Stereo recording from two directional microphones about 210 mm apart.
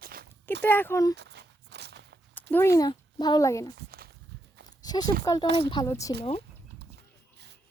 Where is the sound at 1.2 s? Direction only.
55° right (ahead or behind).